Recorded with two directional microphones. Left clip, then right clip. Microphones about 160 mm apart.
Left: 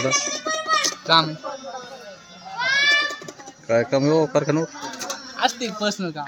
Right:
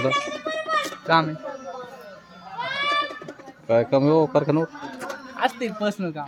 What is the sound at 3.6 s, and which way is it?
Speech, centre (ahead or behind).